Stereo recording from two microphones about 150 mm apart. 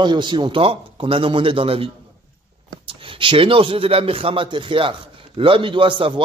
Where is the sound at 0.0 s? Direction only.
30° right (ahead or behind).